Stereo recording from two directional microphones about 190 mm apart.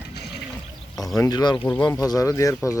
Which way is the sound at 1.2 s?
20° left (ahead or behind).